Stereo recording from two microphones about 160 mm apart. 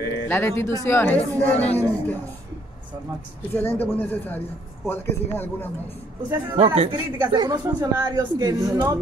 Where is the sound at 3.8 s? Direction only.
10° left (ahead or behind).